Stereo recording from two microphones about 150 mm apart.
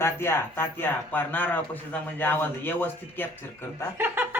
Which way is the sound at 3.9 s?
15° right (ahead or behind).